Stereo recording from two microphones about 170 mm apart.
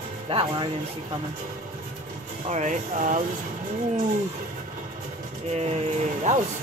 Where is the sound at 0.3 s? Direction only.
30° right (ahead or behind).